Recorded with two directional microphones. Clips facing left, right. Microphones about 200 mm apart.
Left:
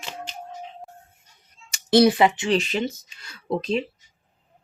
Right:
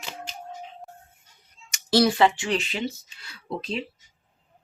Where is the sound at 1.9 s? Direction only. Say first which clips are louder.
Left 3 dB; 20° left (ahead or behind).